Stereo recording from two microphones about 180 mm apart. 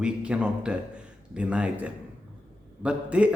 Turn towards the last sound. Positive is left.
turn(degrees=-5)  # may be behind; listen again after turning